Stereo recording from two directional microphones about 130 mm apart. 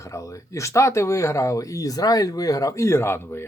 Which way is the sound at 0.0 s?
25° left (ahead or behind).